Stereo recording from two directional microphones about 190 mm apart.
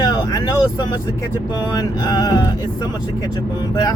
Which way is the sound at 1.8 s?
20° left (ahead or behind).